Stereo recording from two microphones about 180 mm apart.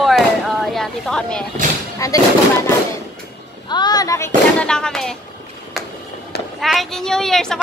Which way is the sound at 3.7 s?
25° left (ahead or behind).